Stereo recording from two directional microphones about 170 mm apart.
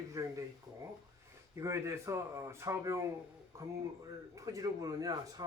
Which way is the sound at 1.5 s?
15° right (ahead or behind).